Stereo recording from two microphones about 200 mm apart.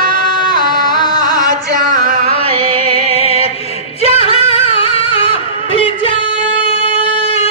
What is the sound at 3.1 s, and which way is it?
Music, 30° left (ahead or behind).